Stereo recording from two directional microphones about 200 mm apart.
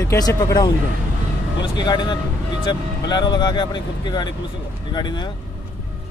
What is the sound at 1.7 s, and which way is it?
Speech, 20° left (ahead or behind).